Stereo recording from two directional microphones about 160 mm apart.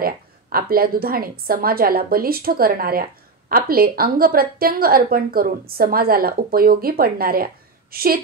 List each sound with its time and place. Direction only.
0.0 s a woman's voice: 65° right (ahead or behind)